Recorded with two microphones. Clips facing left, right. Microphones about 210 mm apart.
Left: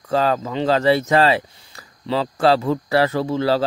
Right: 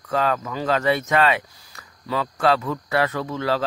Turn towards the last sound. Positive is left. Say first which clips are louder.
# left 5 dB
turn(degrees=30)  # may be behind; listen again after turning